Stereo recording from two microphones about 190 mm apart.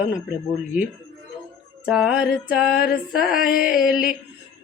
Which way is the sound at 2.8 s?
50° left (ahead or behind).